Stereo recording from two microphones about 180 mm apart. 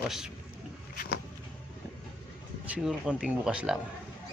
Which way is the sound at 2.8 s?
5° right (ahead or behind).